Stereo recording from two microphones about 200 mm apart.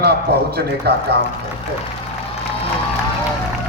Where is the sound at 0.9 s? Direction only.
55° right (ahead or behind).